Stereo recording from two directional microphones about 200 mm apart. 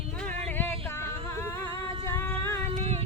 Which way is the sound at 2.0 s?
10° left (ahead or behind).